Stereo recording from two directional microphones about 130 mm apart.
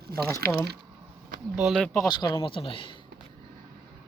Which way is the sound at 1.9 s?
30° left (ahead or behind).